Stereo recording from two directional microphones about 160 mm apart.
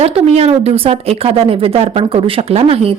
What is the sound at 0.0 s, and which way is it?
Speech, 40° right (ahead or behind).